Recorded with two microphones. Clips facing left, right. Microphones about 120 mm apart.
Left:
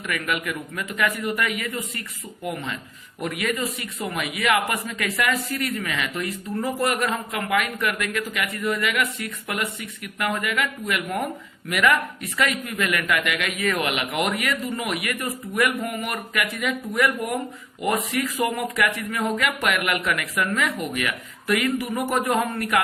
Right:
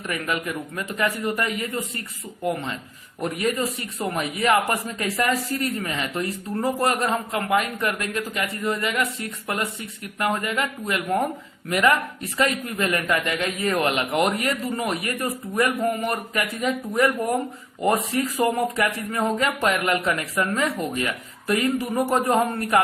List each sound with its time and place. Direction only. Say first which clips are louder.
0.1 s a man's voice: even; 30° right (ahead or behind)